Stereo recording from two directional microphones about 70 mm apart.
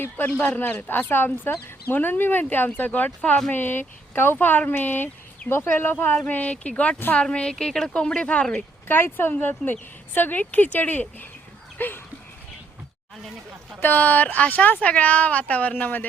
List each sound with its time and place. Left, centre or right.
0.0 s speech: left
5.4 s speech: centre
5.7 s speech: left
8.9 s speech: left
11.8 s a sound: left
13.7 s speech: left